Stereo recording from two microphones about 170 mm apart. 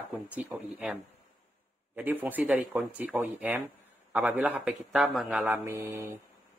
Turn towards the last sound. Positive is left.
turn(degrees=-15)  # may be behind; listen again after turning